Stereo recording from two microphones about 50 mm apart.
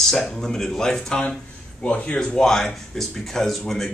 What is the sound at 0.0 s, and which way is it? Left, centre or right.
Speech, centre.